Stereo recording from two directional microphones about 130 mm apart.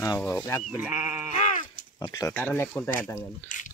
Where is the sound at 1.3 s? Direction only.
70° left (ahead or behind).